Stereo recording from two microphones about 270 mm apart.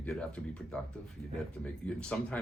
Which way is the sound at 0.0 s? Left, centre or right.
Centre.